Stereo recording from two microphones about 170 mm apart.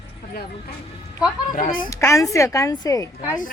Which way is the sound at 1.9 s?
20° left (ahead or behind).